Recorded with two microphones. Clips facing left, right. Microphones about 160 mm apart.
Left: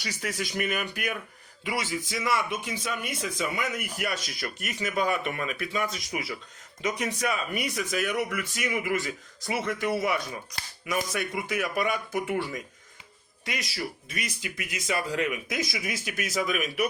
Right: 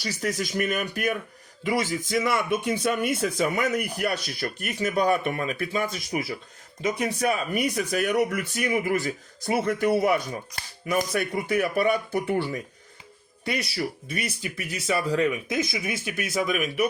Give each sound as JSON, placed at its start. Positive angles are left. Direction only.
{"t": 0.0, "sound": "speech", "side_deg": -40}
{"t": 6.8, "sound": "speech", "side_deg": -30}
{"t": 10.8, "sound": "speech", "side_deg": -35}